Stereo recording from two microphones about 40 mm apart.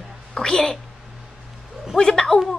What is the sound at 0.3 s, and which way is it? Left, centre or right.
Speech, left.